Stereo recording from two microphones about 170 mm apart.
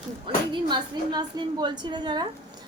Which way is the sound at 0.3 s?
30° right (ahead or behind).